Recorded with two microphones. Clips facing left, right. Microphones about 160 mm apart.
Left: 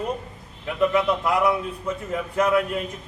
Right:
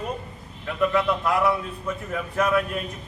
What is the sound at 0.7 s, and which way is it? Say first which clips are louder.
A man's voice: left 2 dB; 15° left (ahead or behind).